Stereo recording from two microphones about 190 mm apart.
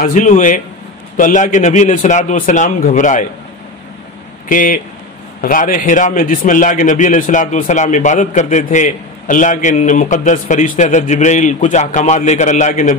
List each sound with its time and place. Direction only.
0.0 s a man's voice: 40° left (ahead or behind)
4.5 s a man's voice: 45° left (ahead or behind)